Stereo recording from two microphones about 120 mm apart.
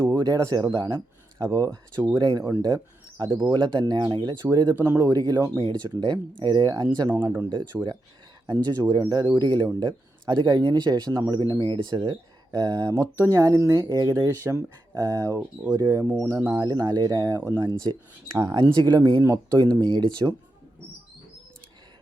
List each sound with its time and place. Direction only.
0.1 s speech: 35° right (ahead or behind)
4.7 s speech: 20° right (ahead or behind)
5.0 s speech: 35° right (ahead or behind)
7.1 s speech: 20° right (ahead or behind)
8.4 s speech: 35° right (ahead or behind)
16.1 s speech: 20° right (ahead or behind)
16.5 s speech: 35° right (ahead or behind)